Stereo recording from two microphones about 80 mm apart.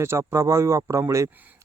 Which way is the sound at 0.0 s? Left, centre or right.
Right.